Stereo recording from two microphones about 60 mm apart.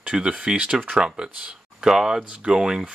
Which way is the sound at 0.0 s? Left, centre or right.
Centre.